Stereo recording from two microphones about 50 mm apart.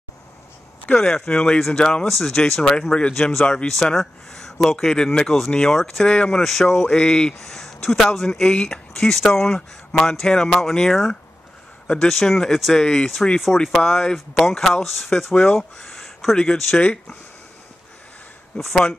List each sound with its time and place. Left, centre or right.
0.9 s speech: centre
2.0 s speech: centre
3.9 s speech: centre
6.4 s speech: centre
7.3 s speech: centre
16.7 s speech: centre
18.5 s speech: centre